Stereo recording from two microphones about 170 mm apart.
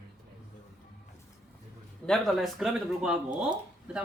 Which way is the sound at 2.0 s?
Centre (ahead or behind).